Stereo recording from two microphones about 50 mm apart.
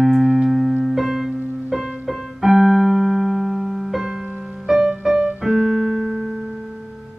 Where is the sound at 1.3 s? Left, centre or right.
Centre.